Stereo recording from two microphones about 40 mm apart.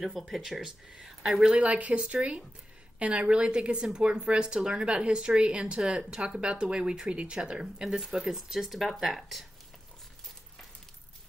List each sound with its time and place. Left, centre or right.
0.2 s speech: centre
0.5 s speech: centre
1.6 s speech: right; by 7.6 s centre
8.0 s speech: centre